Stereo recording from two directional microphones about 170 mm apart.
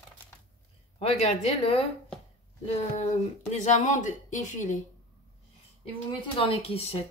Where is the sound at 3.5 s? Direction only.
45° left (ahead or behind).